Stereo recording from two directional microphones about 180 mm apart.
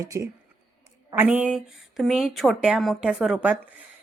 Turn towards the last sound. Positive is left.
turn(degrees=-5)  # may be behind; listen again after turning